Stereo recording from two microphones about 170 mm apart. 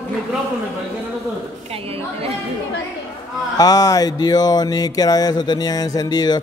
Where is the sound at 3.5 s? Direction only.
20° left (ahead or behind).